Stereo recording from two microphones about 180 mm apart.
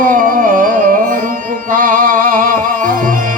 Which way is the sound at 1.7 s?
50° right (ahead or behind).